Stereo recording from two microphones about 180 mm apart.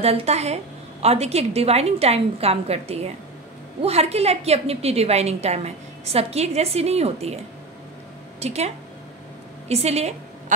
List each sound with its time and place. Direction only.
0.0 s a woman's voice: 35° right (ahead or behind)
8.4 s a woman's voice: 35° right (ahead or behind)